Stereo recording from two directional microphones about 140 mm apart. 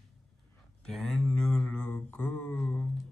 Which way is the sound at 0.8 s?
5° left (ahead or behind).